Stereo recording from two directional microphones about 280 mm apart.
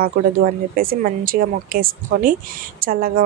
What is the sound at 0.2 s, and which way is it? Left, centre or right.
A woman's voice, right.